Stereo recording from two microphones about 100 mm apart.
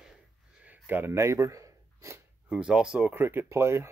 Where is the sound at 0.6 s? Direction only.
20° right (ahead or behind).